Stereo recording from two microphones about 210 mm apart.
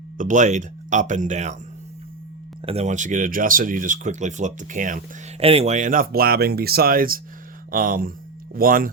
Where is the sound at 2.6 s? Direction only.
30° right (ahead or behind).